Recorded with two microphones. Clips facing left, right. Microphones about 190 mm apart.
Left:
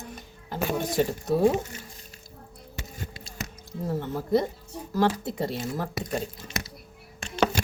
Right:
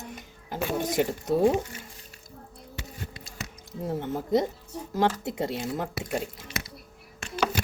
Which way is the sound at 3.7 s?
20° right (ahead or behind).